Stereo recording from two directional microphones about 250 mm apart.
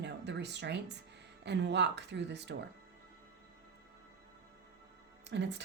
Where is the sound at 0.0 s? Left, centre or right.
Right.